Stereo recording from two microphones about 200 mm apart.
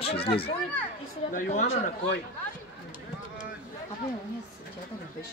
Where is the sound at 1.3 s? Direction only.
40° left (ahead or behind).